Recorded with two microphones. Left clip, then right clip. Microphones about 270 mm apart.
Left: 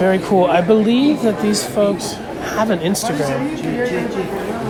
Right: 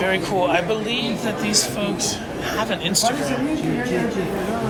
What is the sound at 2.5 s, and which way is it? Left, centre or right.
Speech, centre.